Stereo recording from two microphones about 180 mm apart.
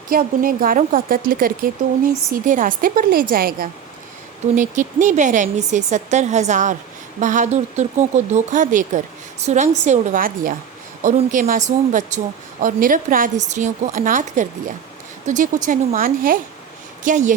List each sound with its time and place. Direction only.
0.1 s a woman's voice: 55° right (ahead or behind)